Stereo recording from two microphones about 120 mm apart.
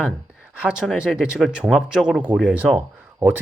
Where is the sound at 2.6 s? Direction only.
10° right (ahead or behind).